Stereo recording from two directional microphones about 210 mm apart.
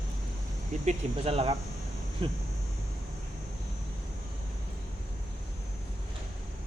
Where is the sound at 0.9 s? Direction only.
30° right (ahead or behind).